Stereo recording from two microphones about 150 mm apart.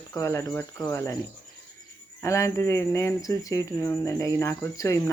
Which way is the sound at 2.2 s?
20° left (ahead or behind).